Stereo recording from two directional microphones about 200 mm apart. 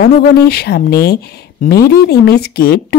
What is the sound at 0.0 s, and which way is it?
Speech, 55° left (ahead or behind).